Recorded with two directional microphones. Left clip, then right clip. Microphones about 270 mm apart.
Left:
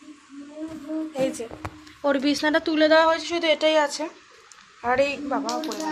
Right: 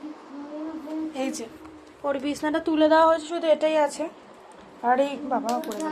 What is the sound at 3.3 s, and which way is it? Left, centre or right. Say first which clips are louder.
Speech: left 1 dB; centre.